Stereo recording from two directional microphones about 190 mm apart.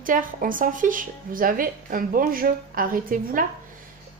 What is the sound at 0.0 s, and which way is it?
Speech, 45° right (ahead or behind).